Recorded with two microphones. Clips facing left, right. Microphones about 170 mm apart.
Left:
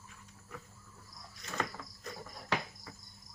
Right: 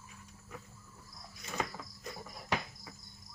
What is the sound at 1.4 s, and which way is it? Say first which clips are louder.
Cricket: even; 10° right (ahead or behind).